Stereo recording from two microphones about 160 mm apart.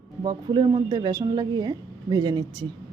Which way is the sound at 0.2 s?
30° right (ahead or behind).